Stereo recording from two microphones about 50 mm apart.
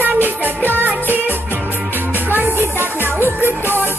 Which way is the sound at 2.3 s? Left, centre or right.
Right.